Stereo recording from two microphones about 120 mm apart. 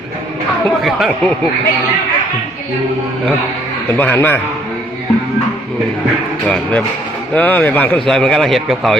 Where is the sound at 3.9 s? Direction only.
15° left (ahead or behind).